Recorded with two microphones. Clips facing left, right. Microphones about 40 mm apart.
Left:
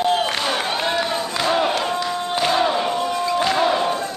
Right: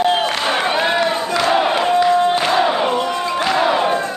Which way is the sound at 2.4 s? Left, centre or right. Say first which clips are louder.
Right 3 dB; right.